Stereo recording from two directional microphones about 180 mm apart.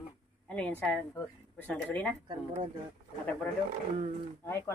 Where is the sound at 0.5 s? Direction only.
5° left (ahead or behind).